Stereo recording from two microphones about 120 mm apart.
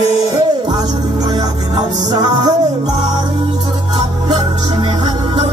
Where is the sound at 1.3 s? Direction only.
35° right (ahead or behind).